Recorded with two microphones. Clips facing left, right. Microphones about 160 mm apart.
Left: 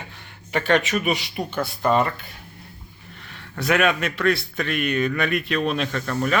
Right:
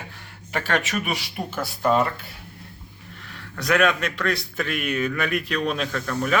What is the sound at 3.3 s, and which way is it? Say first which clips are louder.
A man's voice: left 1 dB; 5° left (ahead or behind).